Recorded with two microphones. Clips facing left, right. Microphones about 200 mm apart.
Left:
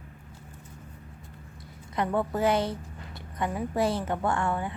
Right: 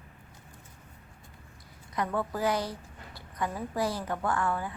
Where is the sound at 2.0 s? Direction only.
25° left (ahead or behind).